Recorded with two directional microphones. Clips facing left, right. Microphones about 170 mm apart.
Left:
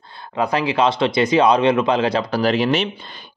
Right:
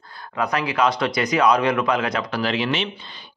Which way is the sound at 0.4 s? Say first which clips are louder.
Left 3 dB; 30° left (ahead or behind).